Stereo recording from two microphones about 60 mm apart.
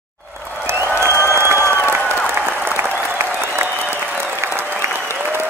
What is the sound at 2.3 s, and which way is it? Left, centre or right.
Applause, right.